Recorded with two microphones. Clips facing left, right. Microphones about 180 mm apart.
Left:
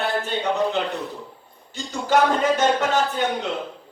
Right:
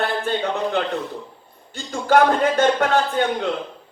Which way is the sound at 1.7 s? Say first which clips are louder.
Right 3 dB; 55° right (ahead or behind).